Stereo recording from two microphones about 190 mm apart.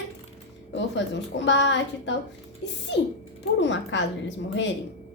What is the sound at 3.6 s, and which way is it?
A woman's voice, 70° left (ahead or behind).